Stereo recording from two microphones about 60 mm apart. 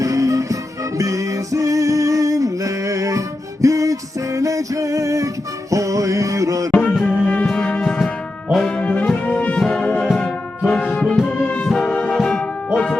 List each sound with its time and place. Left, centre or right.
0.0 s music: right
6.7 s music: centre
8.5 s brass instrument: centre
8.8 s brass instrument: left
10.8 s music: left